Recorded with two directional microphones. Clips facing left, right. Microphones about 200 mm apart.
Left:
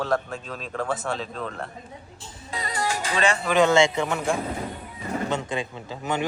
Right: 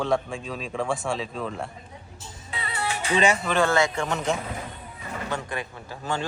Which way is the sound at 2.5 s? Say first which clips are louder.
Left 3 dB; 35° left (ahead or behind).